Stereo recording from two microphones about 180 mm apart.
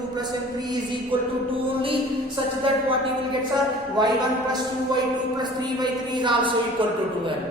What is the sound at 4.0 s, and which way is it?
A man's voice, 25° right (ahead or behind).